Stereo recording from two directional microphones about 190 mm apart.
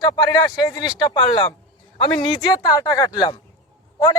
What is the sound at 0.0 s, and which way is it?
A man's voice, 20° left (ahead or behind).